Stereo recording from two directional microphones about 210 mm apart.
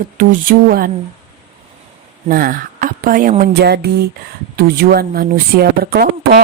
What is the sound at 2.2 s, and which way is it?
A woman's voice, 40° right (ahead or behind).